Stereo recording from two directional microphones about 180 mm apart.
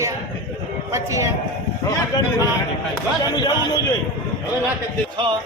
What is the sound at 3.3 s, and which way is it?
Speech, 20° left (ahead or behind).